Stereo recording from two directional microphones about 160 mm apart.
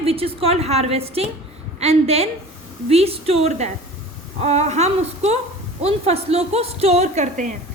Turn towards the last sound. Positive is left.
turn(degrees=-50)  # may be behind; listen again after turning